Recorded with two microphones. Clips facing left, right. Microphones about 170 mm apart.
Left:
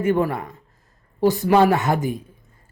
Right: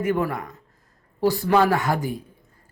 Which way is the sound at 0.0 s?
30° left (ahead or behind).